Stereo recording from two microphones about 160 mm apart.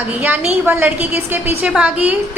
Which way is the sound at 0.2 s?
10° right (ahead or behind).